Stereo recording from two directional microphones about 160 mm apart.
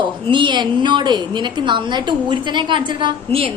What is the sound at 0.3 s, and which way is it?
A woman's voice, 30° right (ahead or behind).